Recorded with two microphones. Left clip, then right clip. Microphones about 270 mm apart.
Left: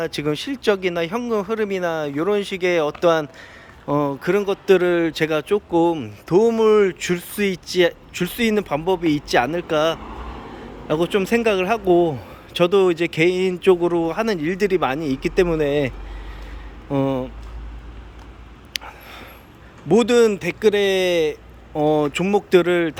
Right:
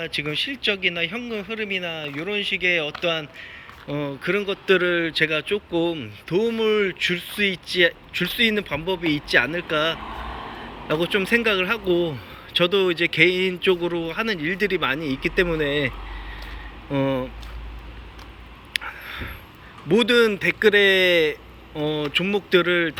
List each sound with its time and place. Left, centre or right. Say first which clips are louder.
0.0 s speech: left 2 dB; centre
16.9 s speech: left 2 dB; centre
18.7 s a sound: right 3 dB; centre
19.9 s speech: left 2 dB; centre